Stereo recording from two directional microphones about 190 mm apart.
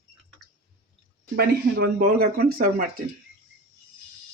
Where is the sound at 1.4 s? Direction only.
55° right (ahead or behind).